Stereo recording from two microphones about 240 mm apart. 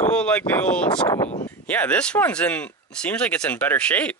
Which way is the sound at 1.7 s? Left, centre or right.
Centre.